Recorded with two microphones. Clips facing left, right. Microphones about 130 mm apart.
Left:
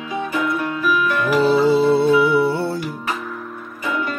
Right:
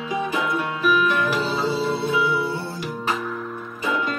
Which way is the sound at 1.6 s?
55° left (ahead or behind).